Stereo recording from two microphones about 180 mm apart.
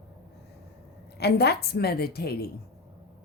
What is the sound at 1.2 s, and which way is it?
A woman's voice, 65° left (ahead or behind).